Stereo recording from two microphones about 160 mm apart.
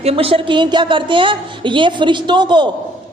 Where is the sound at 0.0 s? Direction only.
40° right (ahead or behind).